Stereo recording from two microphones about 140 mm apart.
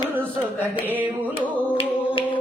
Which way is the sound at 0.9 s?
10° right (ahead or behind).